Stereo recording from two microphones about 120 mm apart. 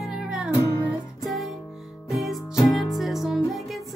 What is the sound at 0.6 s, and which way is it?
Music, 30° left (ahead or behind).